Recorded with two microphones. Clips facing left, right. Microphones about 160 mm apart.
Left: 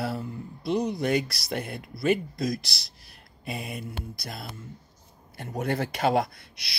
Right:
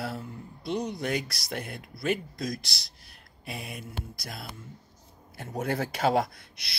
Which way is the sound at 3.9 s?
60° left (ahead or behind).